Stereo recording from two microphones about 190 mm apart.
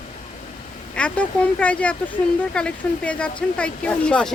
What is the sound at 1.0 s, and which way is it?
Speech, 5° left (ahead or behind).